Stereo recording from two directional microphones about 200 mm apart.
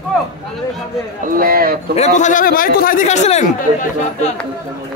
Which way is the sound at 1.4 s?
45° right (ahead or behind).